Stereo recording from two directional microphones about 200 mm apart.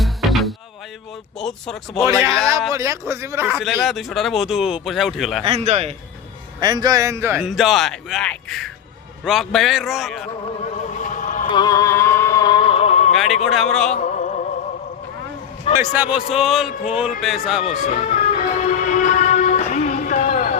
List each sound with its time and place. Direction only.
0.0 s music: centre (ahead or behind)
1.4 s speech: centre (ahead or behind)
2.7 s a man's voice: 15° right (ahead or behind)
3.6 s speech: centre (ahead or behind)
5.4 s a man's voice: 30° right (ahead or behind)
6.6 s speech: 20° right (ahead or behind); by 10.2 s centre (ahead or behind)
11.0 s a sound: 40° left (ahead or behind)
11.4 s a sound: 20° left (ahead or behind)
13.1 s a man's voice: centre (ahead or behind)
13.9 s music: 40° left (ahead or behind)
15.8 s a man's voice: 10° right (ahead or behind)
17.7 s music: 40° left (ahead or behind)